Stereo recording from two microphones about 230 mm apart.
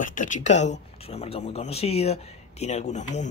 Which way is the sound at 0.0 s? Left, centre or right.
Left.